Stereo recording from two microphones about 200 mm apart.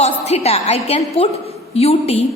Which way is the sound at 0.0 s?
30° left (ahead or behind).